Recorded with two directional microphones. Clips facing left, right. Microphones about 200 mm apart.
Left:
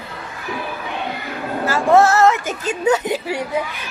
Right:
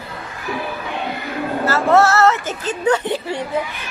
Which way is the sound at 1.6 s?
15° left (ahead or behind).